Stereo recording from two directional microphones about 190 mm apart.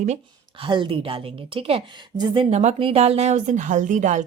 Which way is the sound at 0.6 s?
25° right (ahead or behind).